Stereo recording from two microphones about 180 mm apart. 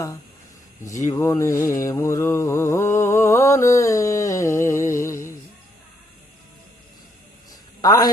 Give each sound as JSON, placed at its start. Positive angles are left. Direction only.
{"t": 1.1, "sound": "mantra", "side_deg": 15}
{"t": 7.8, "sound": "a man's voice", "side_deg": 20}